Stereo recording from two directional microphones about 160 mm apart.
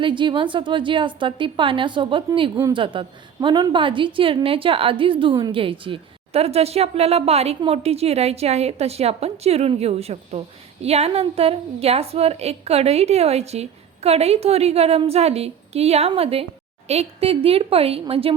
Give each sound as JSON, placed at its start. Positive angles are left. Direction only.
{"t": 0.0, "sound": "a woman's voice", "side_deg": -30}